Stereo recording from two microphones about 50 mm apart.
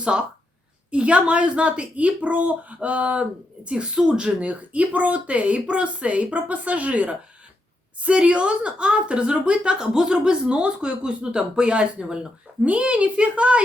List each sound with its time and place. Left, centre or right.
0.0 s a woman's voice: centre